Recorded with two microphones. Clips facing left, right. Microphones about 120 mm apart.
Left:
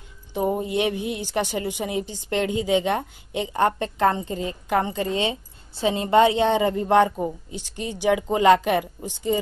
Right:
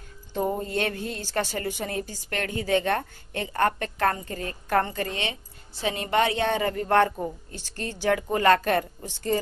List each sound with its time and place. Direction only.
0.3 s a woman's voice: 15° left (ahead or behind)